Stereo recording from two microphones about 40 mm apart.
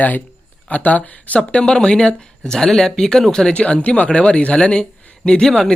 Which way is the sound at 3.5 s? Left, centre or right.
Left.